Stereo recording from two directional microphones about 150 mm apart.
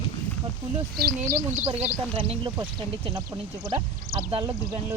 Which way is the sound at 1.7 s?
45° right (ahead or behind).